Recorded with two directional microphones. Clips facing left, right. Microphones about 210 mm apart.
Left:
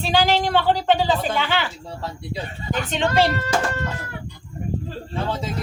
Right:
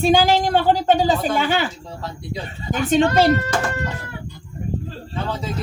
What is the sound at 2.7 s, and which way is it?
Speech, 45° right (ahead or behind).